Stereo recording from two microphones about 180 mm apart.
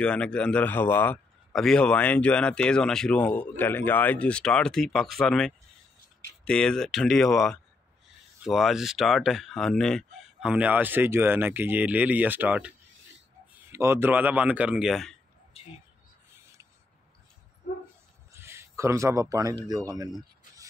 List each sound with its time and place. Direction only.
0.0 s a man's voice: 5° left (ahead or behind)
10.5 s speech: 10° right (ahead or behind)
18.3 s speech: 15° right (ahead or behind)